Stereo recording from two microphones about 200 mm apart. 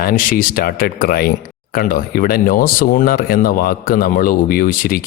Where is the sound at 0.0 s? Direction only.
45° left (ahead or behind).